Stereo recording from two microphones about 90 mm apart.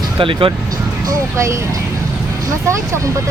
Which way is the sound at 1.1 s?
35° right (ahead or behind).